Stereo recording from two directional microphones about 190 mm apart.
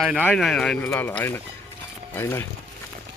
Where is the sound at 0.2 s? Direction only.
5° left (ahead or behind).